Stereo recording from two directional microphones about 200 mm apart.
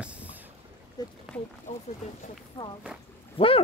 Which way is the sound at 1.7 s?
35° left (ahead or behind).